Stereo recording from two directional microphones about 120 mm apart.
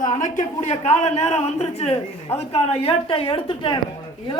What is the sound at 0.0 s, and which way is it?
A man's voice, 90° left.